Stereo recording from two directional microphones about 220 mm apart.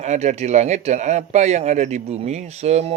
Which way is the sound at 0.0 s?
30° right (ahead or behind).